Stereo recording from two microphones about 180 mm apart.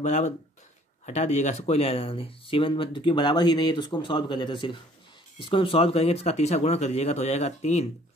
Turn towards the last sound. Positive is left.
turn(degrees=40)  # may be behind; listen again after turning